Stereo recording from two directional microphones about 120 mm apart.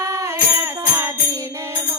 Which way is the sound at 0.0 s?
25° right (ahead or behind).